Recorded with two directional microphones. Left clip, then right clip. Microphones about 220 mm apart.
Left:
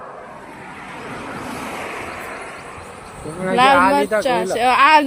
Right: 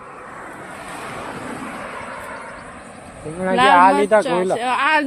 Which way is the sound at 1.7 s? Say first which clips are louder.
Left 2 dB; 55° left (ahead or behind).